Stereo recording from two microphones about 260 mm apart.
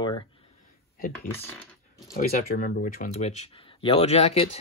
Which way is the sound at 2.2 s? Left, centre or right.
Left.